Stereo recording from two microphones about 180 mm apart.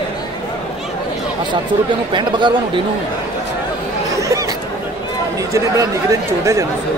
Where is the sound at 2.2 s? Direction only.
25° right (ahead or behind).